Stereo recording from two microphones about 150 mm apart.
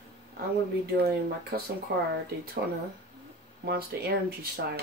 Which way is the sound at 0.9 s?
90° right.